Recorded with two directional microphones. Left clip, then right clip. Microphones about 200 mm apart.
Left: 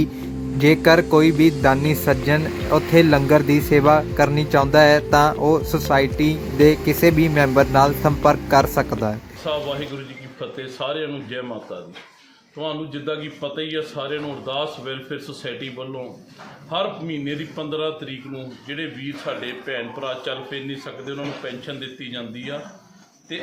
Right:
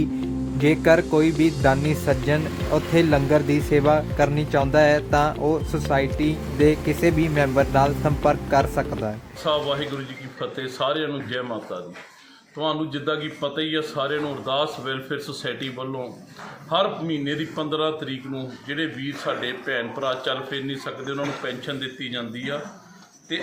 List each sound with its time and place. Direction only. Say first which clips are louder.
0.6 s speech: left 3 dB; 15° left (ahead or behind)
9.4 s a man's voice: right 2 dB; centre (ahead or behind)
12.5 s a man's voice: right 3 dB; 5° right (ahead or behind)